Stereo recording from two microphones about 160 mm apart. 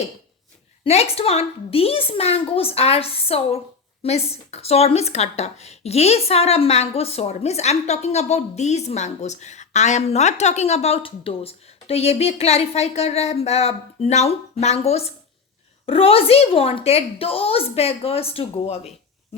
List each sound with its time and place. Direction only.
0.9 s speech: 40° left (ahead or behind)